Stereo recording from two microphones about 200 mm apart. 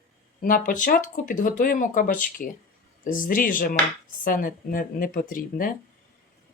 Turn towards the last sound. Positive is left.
turn(degrees=45)  # may be behind; listen again after turning